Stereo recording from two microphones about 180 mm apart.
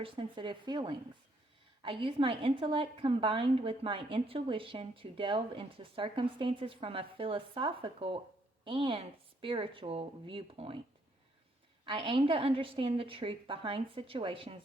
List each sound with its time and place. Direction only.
0.0 s a woman's voice: 30° right (ahead or behind)
11.9 s a woman's voice: 25° right (ahead or behind)